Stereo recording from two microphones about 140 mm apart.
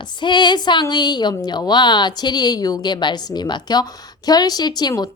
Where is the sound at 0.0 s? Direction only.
35° left (ahead or behind).